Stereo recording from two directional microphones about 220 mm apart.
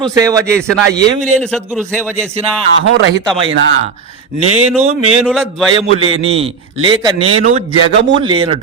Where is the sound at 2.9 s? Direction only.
55° right (ahead or behind).